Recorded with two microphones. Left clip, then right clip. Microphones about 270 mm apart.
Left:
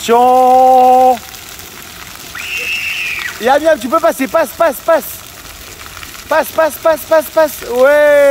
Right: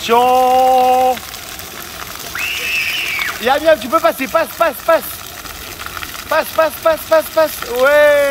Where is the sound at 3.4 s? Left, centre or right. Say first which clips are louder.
Left 3 dB; left.